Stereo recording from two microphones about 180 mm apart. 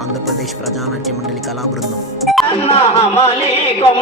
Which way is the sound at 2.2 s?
Centre (ahead or behind).